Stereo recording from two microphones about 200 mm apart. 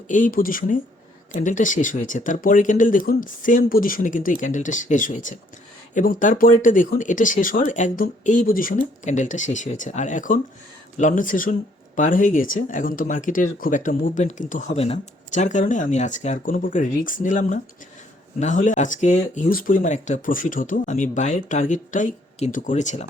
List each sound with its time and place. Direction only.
0.1 s speech: 40° left (ahead or behind)